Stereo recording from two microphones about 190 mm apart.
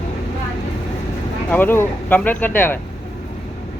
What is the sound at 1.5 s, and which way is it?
Speech, 10° left (ahead or behind).